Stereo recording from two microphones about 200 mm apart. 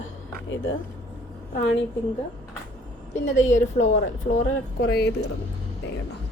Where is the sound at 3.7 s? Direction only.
40° left (ahead or behind).